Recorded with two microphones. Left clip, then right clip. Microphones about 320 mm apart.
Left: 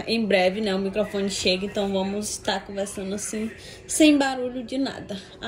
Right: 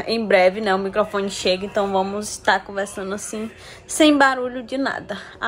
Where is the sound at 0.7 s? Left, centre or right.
Centre.